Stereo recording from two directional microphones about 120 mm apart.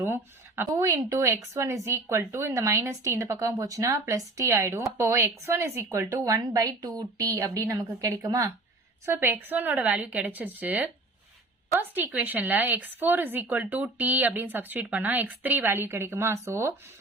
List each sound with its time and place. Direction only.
0.0 s speech: 20° right (ahead or behind)
9.0 s speech: 20° right (ahead or behind)